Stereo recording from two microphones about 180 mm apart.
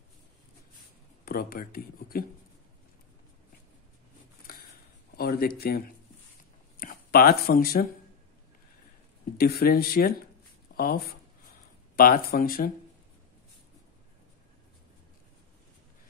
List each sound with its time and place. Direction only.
1.2 s speech: 55° left (ahead or behind)
4.5 s a sound: 55° left (ahead or behind)
5.1 s speech: 55° left (ahead or behind)
9.4 s speech: 60° left (ahead or behind)